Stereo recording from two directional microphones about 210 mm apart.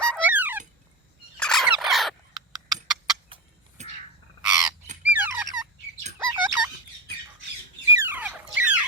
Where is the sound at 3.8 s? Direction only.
35° right (ahead or behind).